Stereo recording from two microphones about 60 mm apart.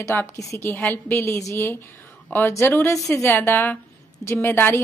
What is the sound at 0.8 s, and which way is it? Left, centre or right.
A woman's voice, left.